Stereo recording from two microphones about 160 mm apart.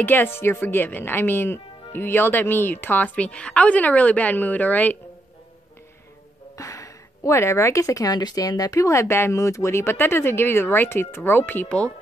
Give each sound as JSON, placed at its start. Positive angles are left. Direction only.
{"t": 0.0, "sound": "speech", "side_deg": 10}
{"t": 6.5, "sound": "speech", "side_deg": 20}